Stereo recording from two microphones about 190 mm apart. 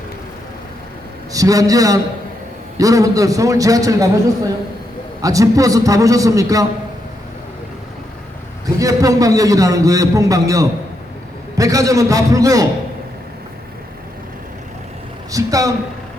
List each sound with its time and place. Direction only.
1.3 s a man's voice: 20° right (ahead or behind)
5.2 s a man's voice: 20° right (ahead or behind)
8.6 s a man's voice: 20° right (ahead or behind)
15.3 s speech: 20° right (ahead or behind)